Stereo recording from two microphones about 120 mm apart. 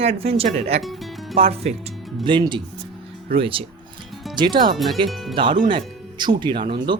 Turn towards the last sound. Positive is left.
turn(degrees=-40)  # may be behind; listen again after turning